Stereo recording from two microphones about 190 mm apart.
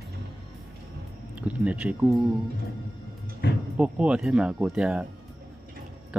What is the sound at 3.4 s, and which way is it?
Speech, 65° left (ahead or behind).